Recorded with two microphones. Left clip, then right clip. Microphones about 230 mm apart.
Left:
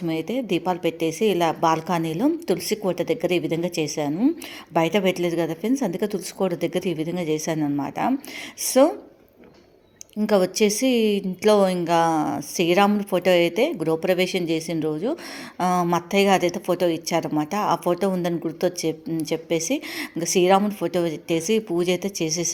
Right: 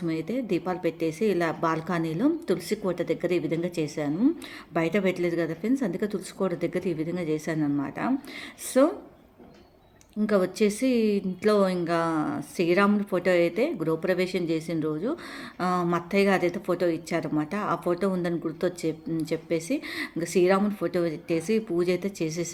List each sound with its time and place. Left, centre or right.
0.1 s a woman's voice: centre
10.2 s a woman's voice: centre